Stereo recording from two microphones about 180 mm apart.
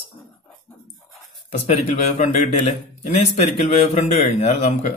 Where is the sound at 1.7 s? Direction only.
40° left (ahead or behind).